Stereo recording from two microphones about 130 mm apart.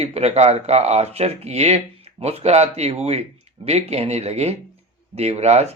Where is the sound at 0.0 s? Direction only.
55° right (ahead or behind).